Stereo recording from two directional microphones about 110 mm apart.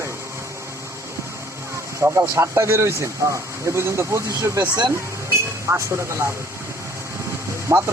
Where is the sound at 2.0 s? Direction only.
25° right (ahead or behind).